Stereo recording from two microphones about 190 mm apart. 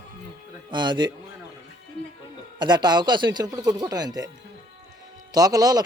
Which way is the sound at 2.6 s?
25° right (ahead or behind).